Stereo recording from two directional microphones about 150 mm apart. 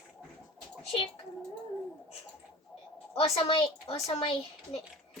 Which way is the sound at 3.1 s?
40° left (ahead or behind).